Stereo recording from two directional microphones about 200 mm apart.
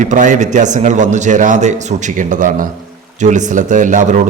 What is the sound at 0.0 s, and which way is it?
A man's voice, 40° right (ahead or behind).